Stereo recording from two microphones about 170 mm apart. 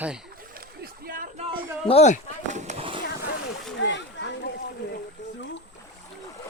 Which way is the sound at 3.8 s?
90° left.